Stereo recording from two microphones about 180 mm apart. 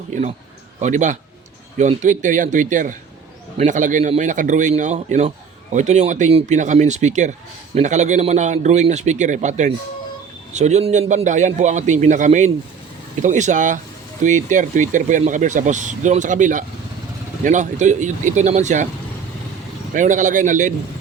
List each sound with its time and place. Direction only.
0.1 s a man's voice: 40° right (ahead or behind)
19.9 s speech: 45° right (ahead or behind)